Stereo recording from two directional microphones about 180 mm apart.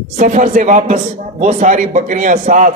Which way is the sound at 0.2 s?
45° right (ahead or behind).